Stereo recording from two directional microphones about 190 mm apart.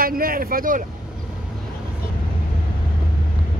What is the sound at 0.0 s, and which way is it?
Speech, 50° right (ahead or behind).